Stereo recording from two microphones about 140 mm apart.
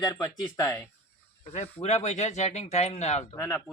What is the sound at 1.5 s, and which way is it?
Speech, 55° left (ahead or behind).